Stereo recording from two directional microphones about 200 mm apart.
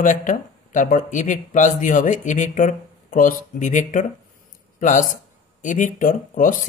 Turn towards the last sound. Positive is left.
turn(degrees=40)  # may be behind; listen again after turning